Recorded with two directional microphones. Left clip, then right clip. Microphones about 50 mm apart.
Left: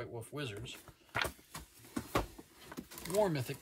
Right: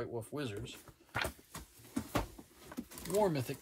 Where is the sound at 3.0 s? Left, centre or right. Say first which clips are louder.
Even; centre.